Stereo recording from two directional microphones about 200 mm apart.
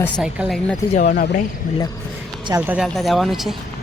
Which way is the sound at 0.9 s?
40° left (ahead or behind).